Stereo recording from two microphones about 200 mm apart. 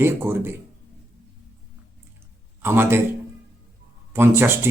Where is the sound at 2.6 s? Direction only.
10° right (ahead or behind).